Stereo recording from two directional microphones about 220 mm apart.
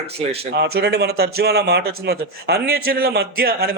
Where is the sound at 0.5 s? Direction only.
50° right (ahead or behind).